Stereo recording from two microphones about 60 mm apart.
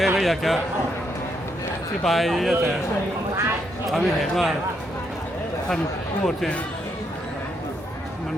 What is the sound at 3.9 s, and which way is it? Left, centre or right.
Speech, centre.